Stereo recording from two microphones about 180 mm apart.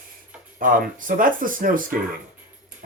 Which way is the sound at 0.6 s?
50° right (ahead or behind).